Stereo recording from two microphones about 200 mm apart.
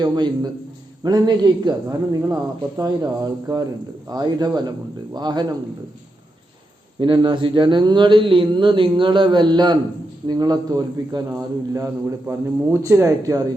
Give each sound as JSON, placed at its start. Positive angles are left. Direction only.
{"t": 0.0, "sound": "speech", "side_deg": -20}
{"t": 7.0, "sound": "speech", "side_deg": -25}